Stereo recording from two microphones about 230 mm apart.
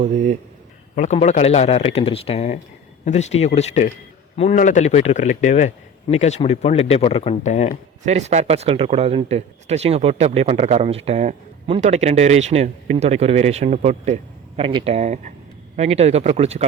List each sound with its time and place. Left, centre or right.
0.0 s speech: right
0.9 s speech: left
8.0 s speech: right